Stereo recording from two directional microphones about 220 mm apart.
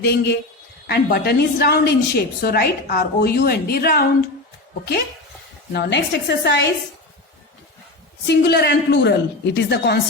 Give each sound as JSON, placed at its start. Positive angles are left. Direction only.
{"t": 0.0, "sound": "a woman's voice", "side_deg": 50}
{"t": 5.7, "sound": "a woman's voice", "side_deg": 50}
{"t": 8.3, "sound": "a woman's voice", "side_deg": 50}